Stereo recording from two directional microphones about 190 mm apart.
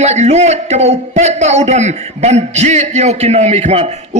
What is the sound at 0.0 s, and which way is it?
A man's voice, 35° right (ahead or behind).